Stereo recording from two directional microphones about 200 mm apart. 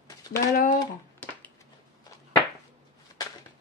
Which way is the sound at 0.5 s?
45° left (ahead or behind).